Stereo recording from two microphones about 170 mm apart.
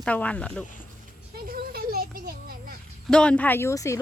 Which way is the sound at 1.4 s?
60° right (ahead or behind).